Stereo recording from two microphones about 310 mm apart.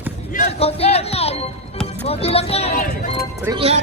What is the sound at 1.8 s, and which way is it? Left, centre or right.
Speech, centre.